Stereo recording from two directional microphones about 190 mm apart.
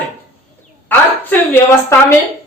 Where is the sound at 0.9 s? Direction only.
10° left (ahead or behind).